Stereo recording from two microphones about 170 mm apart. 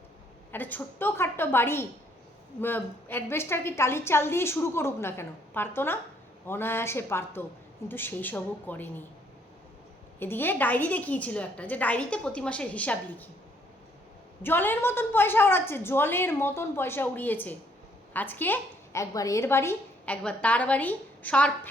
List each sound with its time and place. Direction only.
0.5 s a woman's voice: 10° left (ahead or behind)
10.2 s a woman's voice: 10° left (ahead or behind)
14.4 s a woman's voice: 10° left (ahead or behind)